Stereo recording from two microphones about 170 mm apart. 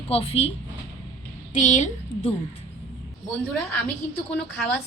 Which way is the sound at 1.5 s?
45° left (ahead or behind).